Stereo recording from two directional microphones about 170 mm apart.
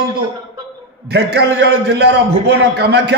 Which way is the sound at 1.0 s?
75° right (ahead or behind).